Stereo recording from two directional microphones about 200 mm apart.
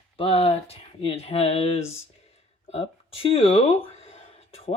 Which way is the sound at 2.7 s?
30° left (ahead or behind).